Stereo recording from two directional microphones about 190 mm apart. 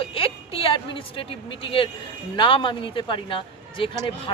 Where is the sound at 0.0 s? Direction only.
30° left (ahead or behind).